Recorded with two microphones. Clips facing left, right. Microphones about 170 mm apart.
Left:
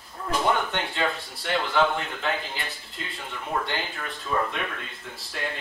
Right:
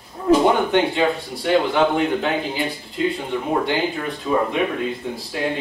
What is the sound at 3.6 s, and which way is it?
Speech, 5° right (ahead or behind).